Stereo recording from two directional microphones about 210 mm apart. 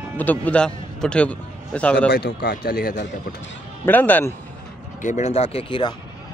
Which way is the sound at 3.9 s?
10° left (ahead or behind).